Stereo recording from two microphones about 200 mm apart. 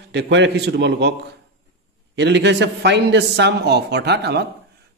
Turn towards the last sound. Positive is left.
turn(degrees=-55)  # may be behind; listen again after turning